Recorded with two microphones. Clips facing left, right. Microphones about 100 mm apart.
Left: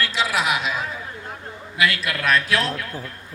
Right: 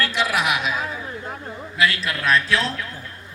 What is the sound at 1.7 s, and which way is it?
Speech, 35° right (ahead or behind).